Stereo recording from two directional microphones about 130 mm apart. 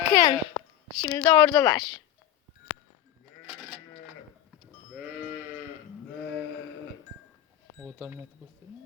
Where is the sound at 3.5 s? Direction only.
10° right (ahead or behind).